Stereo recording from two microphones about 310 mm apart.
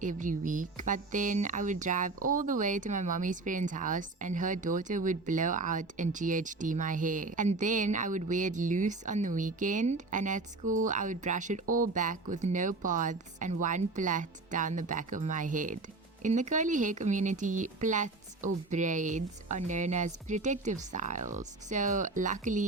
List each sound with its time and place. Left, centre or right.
0.0 s a woman's voice: right
11.6 s speech: right
11.9 s a woman's voice: right